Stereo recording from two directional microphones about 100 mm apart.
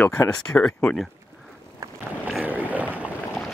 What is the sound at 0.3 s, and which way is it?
Speech, 10° left (ahead or behind).